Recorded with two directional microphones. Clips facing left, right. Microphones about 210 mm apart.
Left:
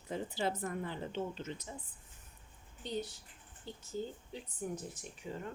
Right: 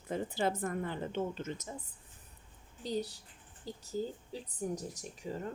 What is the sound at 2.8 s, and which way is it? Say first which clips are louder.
Speech: right 3 dB; 35° right (ahead or behind).